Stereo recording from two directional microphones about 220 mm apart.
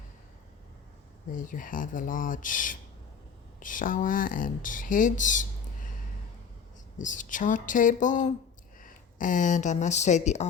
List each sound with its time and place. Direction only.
1.3 s speech: 35° left (ahead or behind)
7.0 s speech: 35° left (ahead or behind)